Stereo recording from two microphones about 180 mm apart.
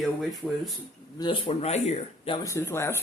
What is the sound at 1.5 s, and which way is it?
Speech, 35° left (ahead or behind).